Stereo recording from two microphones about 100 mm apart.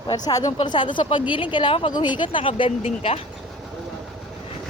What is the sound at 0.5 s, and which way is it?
Speech, 55° left (ahead or behind).